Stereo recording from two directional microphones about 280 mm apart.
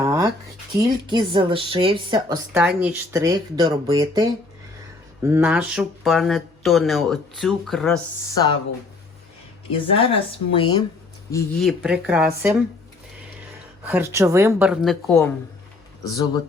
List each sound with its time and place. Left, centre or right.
0.0 s a sound: centre
0.8 s a woman's voice: centre
10.0 s speech: centre
11.8 s speech: centre
13.8 s speech: centre
16.0 s speech: centre